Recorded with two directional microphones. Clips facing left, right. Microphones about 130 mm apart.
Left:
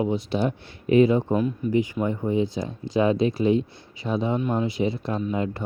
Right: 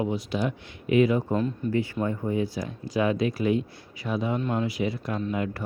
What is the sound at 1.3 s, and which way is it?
Speech, 15° left (ahead or behind).